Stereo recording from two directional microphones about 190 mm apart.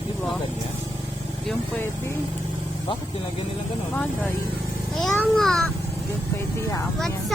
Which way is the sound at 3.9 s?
10° left (ahead or behind).